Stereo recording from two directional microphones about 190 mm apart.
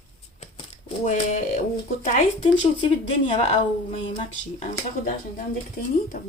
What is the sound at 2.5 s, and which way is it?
Speech, 25° left (ahead or behind).